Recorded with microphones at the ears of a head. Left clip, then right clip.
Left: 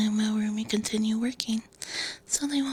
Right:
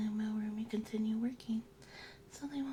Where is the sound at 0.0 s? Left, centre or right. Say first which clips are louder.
Left 12 dB; left.